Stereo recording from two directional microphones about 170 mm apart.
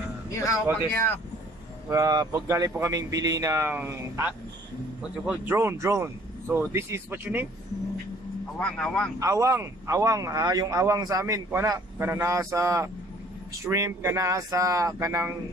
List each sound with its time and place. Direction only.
0.3 s speech: 15° left (ahead or behind)
1.9 s speech: 20° right (ahead or behind)
8.5 s speech: 5° left (ahead or behind)
9.2 s speech: 20° right (ahead or behind)